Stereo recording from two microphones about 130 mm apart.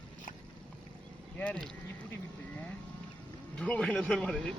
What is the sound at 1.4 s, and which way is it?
Speech, 10° left (ahead or behind).